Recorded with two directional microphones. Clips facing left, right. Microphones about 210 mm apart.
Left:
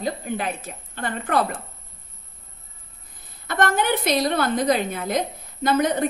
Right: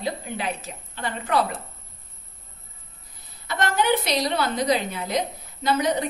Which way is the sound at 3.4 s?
50° left (ahead or behind).